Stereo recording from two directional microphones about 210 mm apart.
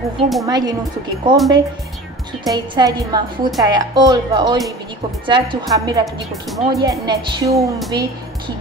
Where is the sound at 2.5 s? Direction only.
20° right (ahead or behind).